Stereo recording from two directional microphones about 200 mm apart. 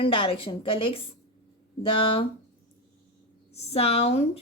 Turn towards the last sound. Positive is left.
turn(degrees=30)  # may be behind; listen again after turning